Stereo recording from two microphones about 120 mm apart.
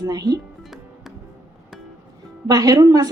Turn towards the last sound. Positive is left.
turn(degrees=-30)  # may be behind; listen again after turning